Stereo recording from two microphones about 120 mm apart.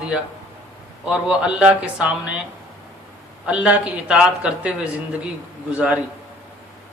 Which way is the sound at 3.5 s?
10° right (ahead or behind).